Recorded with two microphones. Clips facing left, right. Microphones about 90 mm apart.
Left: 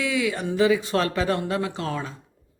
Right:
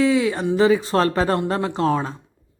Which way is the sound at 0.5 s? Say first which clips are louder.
Right 3 dB; 35° right (ahead or behind).